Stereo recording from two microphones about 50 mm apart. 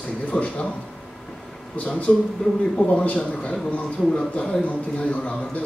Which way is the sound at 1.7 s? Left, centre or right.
Left.